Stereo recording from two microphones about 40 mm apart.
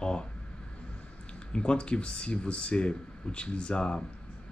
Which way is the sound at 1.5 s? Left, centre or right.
Left.